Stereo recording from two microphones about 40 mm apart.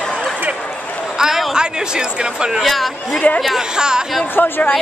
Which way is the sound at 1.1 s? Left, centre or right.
Centre.